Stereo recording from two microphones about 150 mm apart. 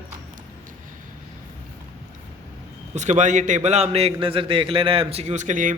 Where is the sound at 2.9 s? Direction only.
50° right (ahead or behind).